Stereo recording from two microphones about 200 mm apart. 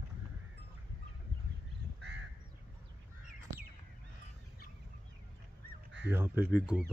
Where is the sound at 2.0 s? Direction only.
55° right (ahead or behind).